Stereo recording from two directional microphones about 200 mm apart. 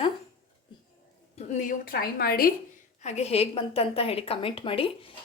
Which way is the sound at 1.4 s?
35° left (ahead or behind).